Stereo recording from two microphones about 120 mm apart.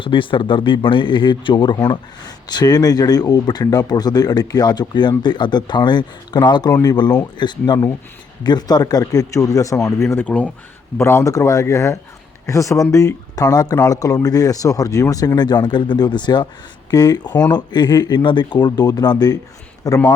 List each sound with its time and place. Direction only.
0.0 s speech: 45° left (ahead or behind); by 10.2 s 25° left (ahead or behind)
10.2 s speech: 10° left (ahead or behind)
10.9 s speech: 20° left (ahead or behind)